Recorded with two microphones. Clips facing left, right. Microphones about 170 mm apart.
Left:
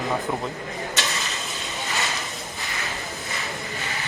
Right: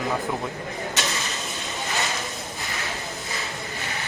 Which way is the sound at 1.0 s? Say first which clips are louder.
Right 1 dB; centre (ahead or behind).